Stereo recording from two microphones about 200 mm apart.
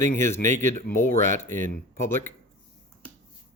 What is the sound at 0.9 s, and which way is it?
Speech, 50° left (ahead or behind).